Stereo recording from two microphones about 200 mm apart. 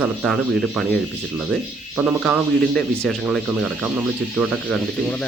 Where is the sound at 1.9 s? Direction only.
5° right (ahead or behind).